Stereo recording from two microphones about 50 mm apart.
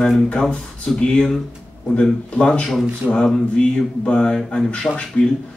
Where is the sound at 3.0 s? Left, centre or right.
Centre.